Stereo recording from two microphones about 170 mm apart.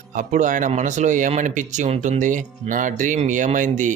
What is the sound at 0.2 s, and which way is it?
Speech, 45° right (ahead or behind).